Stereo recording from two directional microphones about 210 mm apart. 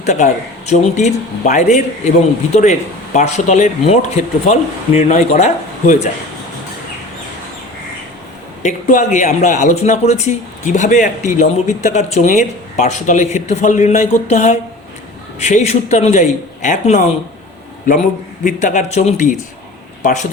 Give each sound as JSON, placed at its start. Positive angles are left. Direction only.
{"t": 0.0, "sound": "speech", "side_deg": 35}
{"t": 8.6, "sound": "speech", "side_deg": 35}
{"t": 18.4, "sound": "speech", "side_deg": 35}